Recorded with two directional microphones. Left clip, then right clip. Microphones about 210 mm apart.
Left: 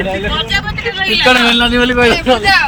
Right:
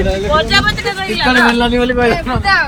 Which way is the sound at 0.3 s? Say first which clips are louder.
Right 4 dB; 40° right (ahead or behind).